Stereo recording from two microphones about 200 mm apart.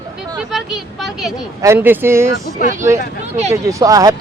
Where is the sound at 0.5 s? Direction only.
Centre (ahead or behind).